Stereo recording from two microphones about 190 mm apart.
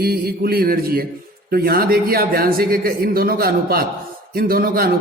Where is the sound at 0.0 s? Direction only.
55° right (ahead or behind).